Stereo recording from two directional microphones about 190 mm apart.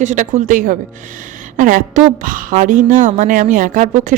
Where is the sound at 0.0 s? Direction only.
40° right (ahead or behind).